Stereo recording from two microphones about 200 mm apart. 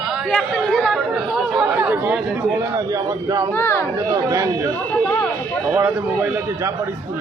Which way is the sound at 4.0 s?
15° right (ahead or behind).